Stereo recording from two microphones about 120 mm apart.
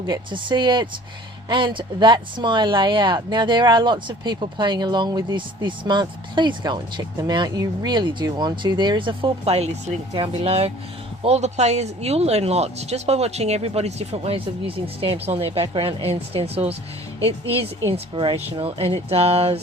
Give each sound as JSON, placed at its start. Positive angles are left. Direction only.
{"t": 0.0, "sound": "speech", "side_deg": -40}
{"t": 17.9, "sound": "speech", "side_deg": -45}